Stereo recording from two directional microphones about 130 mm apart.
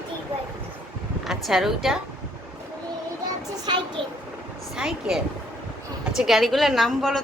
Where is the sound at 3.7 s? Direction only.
40° right (ahead or behind).